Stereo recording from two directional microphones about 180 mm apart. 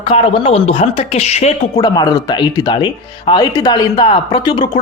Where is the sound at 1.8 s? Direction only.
20° left (ahead or behind).